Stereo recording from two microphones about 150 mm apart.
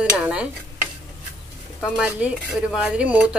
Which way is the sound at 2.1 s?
10° right (ahead or behind).